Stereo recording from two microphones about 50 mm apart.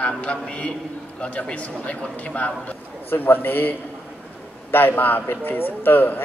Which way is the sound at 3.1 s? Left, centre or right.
Left.